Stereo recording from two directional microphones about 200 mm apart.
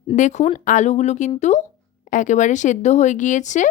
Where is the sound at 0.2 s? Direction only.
40° left (ahead or behind).